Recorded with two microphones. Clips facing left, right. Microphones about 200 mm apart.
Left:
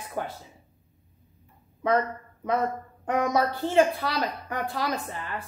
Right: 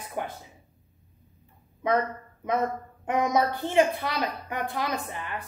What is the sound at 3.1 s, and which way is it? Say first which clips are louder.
A woman's voice: even; 15° right (ahead or behind).